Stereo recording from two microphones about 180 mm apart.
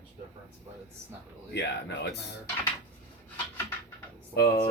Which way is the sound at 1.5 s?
75° left (ahead or behind).